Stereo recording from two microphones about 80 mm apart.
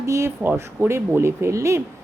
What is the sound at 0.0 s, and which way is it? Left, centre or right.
Speech, right.